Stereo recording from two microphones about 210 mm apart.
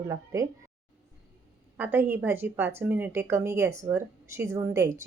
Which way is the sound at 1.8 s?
10° right (ahead or behind).